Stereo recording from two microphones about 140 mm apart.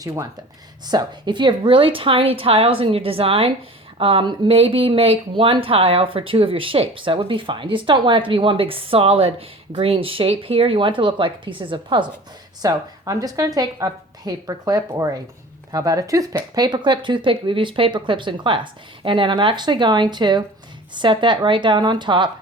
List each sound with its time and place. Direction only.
0.0 s a woman's voice: 25° right (ahead or behind)